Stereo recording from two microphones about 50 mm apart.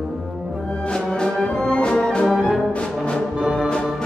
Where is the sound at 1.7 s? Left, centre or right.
Centre.